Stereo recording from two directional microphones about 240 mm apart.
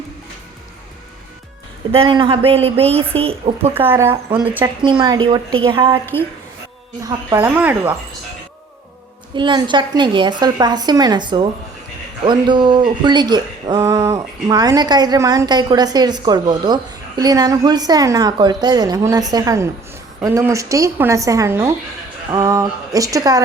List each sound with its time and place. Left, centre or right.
1.9 s a woman's voice: right
3.8 s speech: centre
4.9 s a woman's voice: centre
7.0 s speech: centre
9.3 s a woman's voice: centre